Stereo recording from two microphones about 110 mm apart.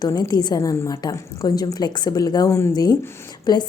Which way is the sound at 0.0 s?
40° left (ahead or behind).